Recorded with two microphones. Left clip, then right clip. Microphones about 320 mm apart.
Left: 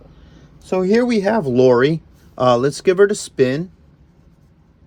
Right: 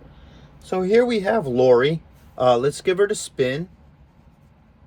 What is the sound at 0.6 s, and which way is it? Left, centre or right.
Speech, centre.